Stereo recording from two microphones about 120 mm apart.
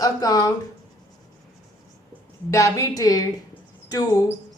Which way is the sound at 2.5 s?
25° left (ahead or behind).